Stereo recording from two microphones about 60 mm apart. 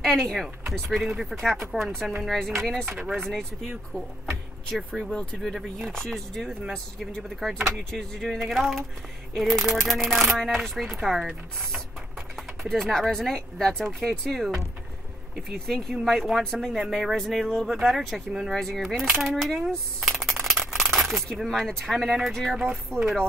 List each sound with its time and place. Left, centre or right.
0.0 s speech: centre
5.5 s speech: centre
5.9 s speech: centre
12.4 s speech: centre
15.6 s speech: centre
16.7 s speech: centre
18.6 s coin: centre
21.4 s speech: centre
22.9 s speech: centre